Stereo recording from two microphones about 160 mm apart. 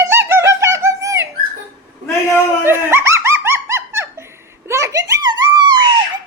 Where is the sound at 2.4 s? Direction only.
15° right (ahead or behind).